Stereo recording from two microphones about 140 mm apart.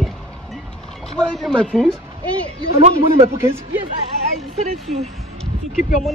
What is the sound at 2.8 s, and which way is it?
Speech, 45° right (ahead or behind).